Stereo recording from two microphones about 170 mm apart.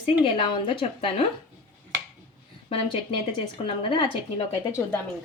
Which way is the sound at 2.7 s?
30° left (ahead or behind).